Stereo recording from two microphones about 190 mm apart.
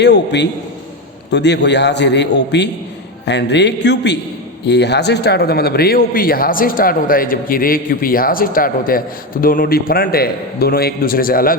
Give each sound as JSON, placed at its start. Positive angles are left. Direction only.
{"t": 0.0, "sound": "a man's voice", "side_deg": 65}